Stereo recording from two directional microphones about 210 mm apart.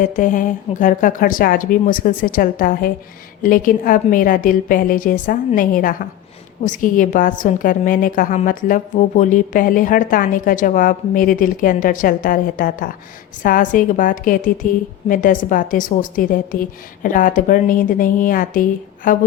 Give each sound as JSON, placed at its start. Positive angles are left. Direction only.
{"t": 0.0, "sound": "a woman's voice", "side_deg": 40}